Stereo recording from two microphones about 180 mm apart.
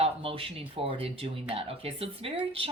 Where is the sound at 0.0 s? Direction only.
30° right (ahead or behind).